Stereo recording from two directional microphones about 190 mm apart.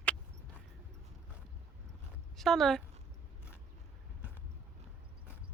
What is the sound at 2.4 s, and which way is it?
Speech, centre (ahead or behind).